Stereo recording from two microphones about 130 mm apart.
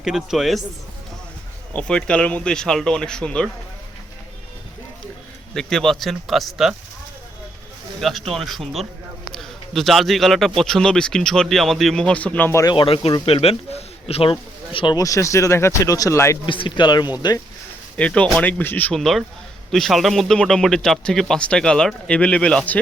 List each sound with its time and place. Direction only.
0.0 s a man's voice: 5° right (ahead or behind)
1.7 s speech: 10° left (ahead or behind)
5.5 s a man's voice: 5° left (ahead or behind)
8.3 s a man's voice: centre (ahead or behind); by 12.7 s 20° left (ahead or behind)
12.7 s speech: 45° left (ahead or behind)
14.9 s speech: 25° left (ahead or behind)
16.5 s speech: 40° left (ahead or behind)
17.9 s speech: 10° left (ahead or behind)
18.9 s a man's voice: centre (ahead or behind)